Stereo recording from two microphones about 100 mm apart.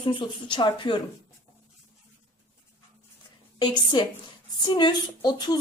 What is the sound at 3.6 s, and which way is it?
Speech, 50° left (ahead or behind).